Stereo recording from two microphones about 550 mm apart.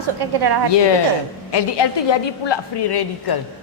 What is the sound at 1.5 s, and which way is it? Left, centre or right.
A woman's voice, left.